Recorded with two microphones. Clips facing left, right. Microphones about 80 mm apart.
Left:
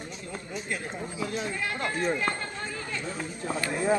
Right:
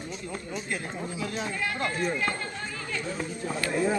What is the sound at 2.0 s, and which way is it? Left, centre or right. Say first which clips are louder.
Speech: left 2 dB; left.